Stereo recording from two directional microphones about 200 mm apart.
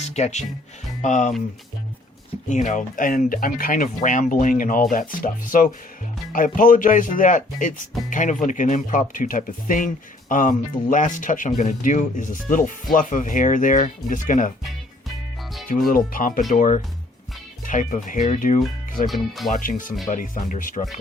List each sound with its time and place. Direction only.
0.1 s speech: 35° left (ahead or behind)
2.5 s speech: 40° left (ahead or behind)
15.7 s speech: 40° left (ahead or behind)
19.0 s speech: centre (ahead or behind)
19.5 s speech: 40° left (ahead or behind)